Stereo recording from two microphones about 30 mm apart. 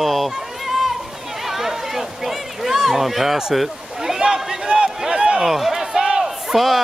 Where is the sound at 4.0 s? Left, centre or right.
Centre.